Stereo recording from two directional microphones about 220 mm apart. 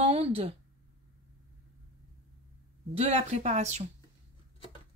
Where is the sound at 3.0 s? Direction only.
30° right (ahead or behind).